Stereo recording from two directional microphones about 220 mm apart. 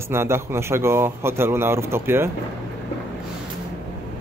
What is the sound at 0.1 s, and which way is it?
A man's voice, 10° right (ahead or behind).